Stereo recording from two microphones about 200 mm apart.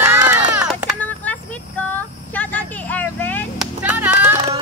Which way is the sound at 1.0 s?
10° left (ahead or behind).